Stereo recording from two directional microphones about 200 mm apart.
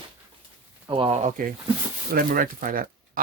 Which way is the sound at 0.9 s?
25° right (ahead or behind).